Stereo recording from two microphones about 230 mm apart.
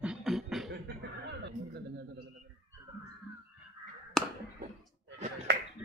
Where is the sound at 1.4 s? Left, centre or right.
Right.